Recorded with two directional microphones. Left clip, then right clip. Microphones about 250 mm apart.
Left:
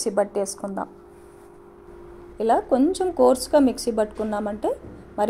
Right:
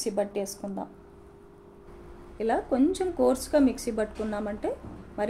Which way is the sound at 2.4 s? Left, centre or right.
Left.